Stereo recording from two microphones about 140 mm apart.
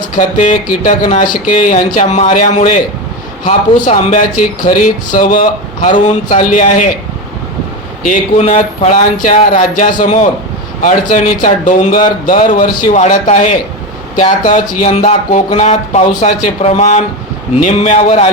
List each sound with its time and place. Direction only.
0.2 s speech: 65° left (ahead or behind)
8.0 s speech: 60° left (ahead or behind)
9.6 s a man's voice: 70° left (ahead or behind); by 18.3 s 50° left (ahead or behind)